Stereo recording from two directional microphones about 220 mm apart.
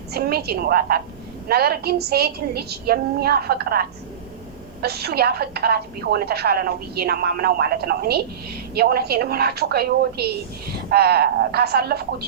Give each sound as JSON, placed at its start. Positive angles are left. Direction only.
{"t": 0.1, "sound": "a woman's voice", "side_deg": -45}